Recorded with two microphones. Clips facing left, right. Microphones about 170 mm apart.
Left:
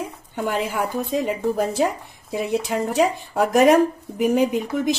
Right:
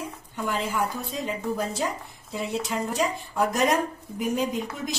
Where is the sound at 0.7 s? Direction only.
65° left (ahead or behind).